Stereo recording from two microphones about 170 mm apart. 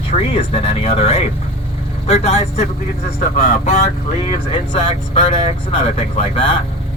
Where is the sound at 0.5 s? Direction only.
35° left (ahead or behind).